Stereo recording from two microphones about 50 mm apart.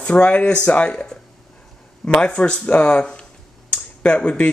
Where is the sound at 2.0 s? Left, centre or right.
Left.